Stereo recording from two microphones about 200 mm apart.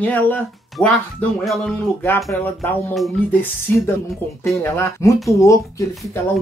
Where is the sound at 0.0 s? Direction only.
10° left (ahead or behind).